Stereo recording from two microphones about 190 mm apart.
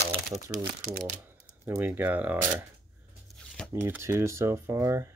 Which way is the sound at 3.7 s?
10° right (ahead or behind).